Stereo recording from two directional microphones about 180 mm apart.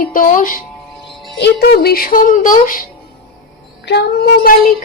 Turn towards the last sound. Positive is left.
turn(degrees=55)  # may be behind; listen again after turning